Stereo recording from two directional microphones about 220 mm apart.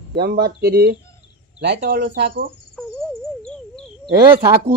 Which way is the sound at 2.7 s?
5° left (ahead or behind).